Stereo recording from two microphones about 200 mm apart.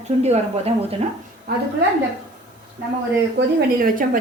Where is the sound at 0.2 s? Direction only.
30° right (ahead or behind).